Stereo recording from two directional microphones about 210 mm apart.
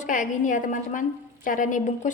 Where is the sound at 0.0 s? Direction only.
40° left (ahead or behind).